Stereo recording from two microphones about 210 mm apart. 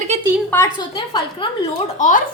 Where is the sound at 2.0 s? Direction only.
35° left (ahead or behind).